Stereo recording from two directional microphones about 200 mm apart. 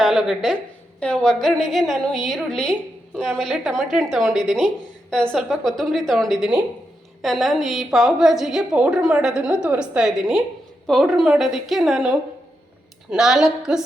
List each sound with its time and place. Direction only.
0.0 s a woman's voice: centre (ahead or behind)